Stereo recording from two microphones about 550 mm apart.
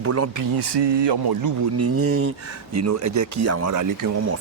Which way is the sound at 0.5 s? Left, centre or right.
Right.